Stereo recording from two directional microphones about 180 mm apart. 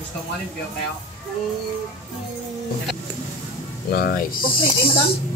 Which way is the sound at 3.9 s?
55° left (ahead or behind).